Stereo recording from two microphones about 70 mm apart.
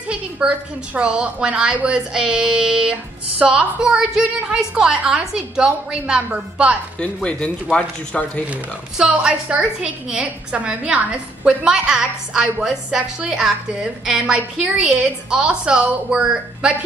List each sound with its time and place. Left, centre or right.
0.1 s a woman's voice: centre
7.0 s speech: centre
8.5 s a woman's voice: centre